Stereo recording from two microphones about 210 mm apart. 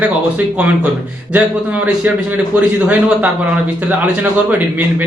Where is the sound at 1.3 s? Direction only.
5° right (ahead or behind).